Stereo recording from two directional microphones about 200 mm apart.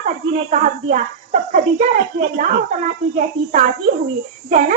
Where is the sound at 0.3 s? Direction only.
35° right (ahead or behind).